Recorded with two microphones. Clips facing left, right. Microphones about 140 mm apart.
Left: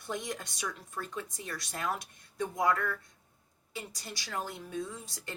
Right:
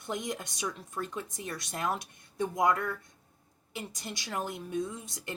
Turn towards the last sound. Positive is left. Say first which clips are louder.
# right 3 dB
turn(degrees=-20)  # may be behind; listen again after turning